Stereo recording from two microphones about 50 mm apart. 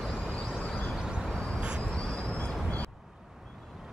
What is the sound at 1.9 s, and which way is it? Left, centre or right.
Vehicle, left.